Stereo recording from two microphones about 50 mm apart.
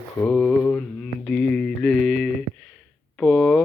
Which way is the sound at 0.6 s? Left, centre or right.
Left.